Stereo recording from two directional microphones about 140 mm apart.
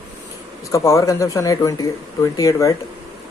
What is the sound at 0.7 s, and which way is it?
Speech, 20° left (ahead or behind).